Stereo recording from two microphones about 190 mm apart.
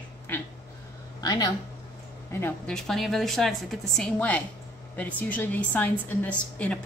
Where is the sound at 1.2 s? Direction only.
20° left (ahead or behind).